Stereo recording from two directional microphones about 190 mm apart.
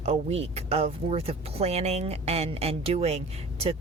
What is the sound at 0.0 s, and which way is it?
Speech, 35° right (ahead or behind).